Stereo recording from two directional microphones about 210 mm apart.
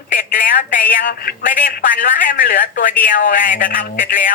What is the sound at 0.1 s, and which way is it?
A man's voice, 40° left (ahead or behind).